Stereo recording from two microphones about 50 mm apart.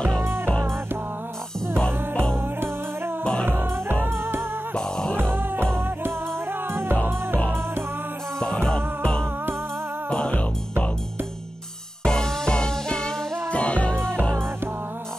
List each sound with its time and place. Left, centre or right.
3.4 s music: right
4.7 s music: centre
5.1 s music: right
6.7 s music: right
8.4 s music: centre
12.0 s music: centre